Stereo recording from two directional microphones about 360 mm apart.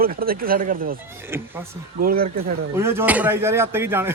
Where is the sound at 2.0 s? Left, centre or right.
Right.